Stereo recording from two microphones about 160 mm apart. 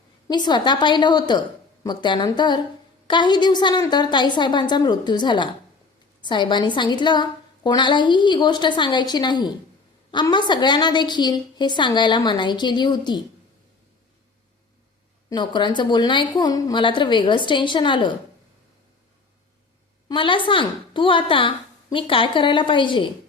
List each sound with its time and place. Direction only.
0.3 s a woman's voice: 25° left (ahead or behind)
15.3 s a woman's voice: 30° left (ahead or behind)
20.1 s a woman's voice: 30° left (ahead or behind)